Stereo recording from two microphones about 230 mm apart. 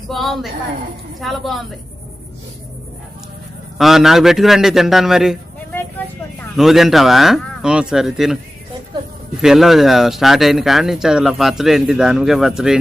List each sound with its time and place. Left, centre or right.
0.1 s speech: centre
3.8 s speech: centre
6.6 s speech: centre
9.4 s speech: centre